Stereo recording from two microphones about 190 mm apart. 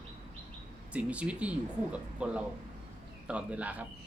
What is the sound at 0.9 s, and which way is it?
Speech, 5° right (ahead or behind).